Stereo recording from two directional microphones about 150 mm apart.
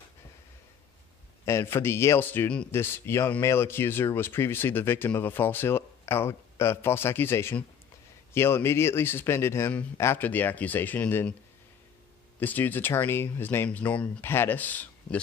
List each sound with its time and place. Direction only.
1.4 s a man's voice: 15° left (ahead or behind)
12.4 s a man's voice: 10° left (ahead or behind)